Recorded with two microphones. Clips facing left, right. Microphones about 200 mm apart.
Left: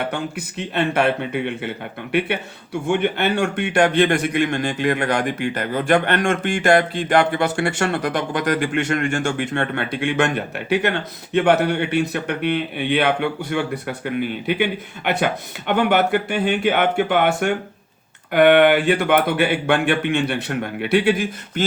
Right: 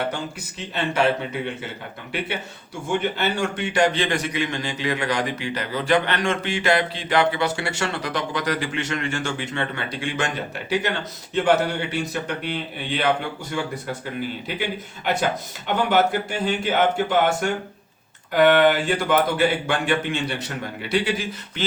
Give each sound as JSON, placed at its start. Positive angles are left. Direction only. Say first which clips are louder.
{"t": 0.1, "sound": "a man's voice", "louder": "left 4 dB", "side_deg": 60}